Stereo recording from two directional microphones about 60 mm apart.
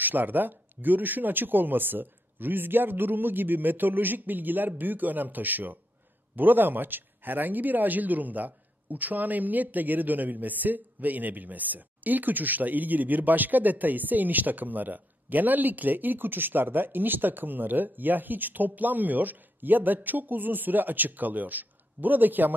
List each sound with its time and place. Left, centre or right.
0.0 s speech: right